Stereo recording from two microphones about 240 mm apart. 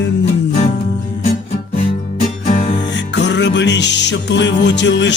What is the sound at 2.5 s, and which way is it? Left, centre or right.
Music, left.